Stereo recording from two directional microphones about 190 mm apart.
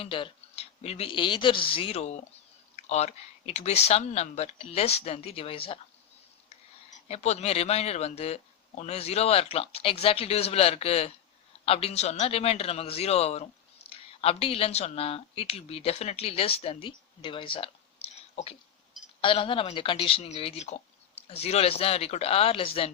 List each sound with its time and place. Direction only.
0.0 s speech: 25° left (ahead or behind)
7.1 s speech: 35° left (ahead or behind)